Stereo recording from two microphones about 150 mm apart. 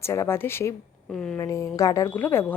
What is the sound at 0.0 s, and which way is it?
A woman's voice, 20° left (ahead or behind).